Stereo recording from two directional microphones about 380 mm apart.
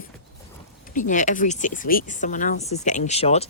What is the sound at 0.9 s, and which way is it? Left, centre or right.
Speech, centre.